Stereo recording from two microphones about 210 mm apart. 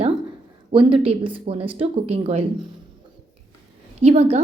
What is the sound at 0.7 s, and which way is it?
A woman's voice, 25° right (ahead or behind).